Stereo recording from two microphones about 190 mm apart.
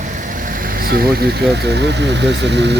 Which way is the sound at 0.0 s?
45° right (ahead or behind).